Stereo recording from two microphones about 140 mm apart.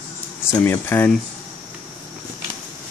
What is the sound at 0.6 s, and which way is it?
Speech, 15° left (ahead or behind).